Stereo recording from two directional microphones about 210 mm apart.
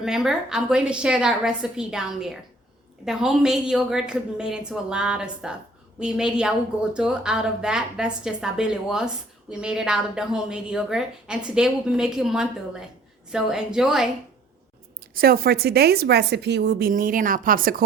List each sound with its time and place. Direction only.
0.0 s a woman's voice: centre (ahead or behind)
15.1 s a woman's voice: 45° right (ahead or behind)